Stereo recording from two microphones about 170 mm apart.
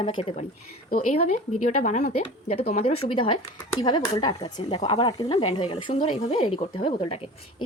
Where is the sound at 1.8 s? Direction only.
45° left (ahead or behind).